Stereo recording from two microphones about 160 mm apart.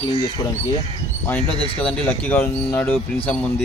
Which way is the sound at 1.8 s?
10° left (ahead or behind).